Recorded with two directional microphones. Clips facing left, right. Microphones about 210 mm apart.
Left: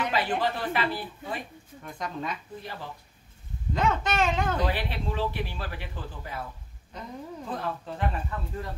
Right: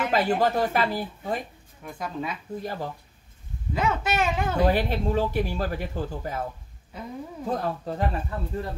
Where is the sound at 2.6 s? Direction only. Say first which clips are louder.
Right 8 dB; 45° right (ahead or behind).